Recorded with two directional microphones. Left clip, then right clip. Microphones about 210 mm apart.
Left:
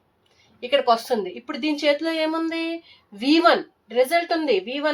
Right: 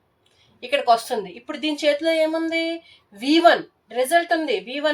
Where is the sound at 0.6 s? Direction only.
30° left (ahead or behind).